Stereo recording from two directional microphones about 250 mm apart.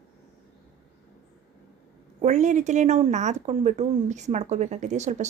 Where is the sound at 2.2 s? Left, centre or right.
Right.